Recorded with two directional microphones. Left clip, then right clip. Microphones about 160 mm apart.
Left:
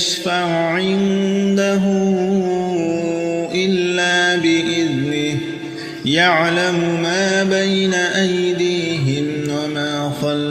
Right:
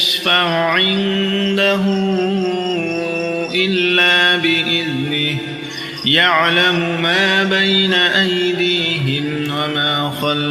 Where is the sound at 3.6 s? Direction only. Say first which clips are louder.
Right 5 dB; 45° left (ahead or behind).